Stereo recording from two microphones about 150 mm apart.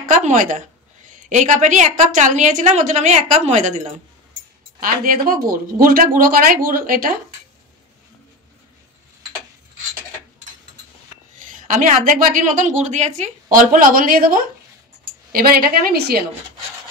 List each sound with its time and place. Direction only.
0.0 s a woman's voice: 55° right (ahead or behind)
4.7 s speech: 70° right (ahead or behind)
11.5 s a woman's voice: 65° right (ahead or behind)
15.3 s a woman's voice: 85° right